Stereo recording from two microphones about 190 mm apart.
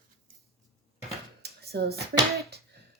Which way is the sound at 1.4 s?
55° right (ahead or behind).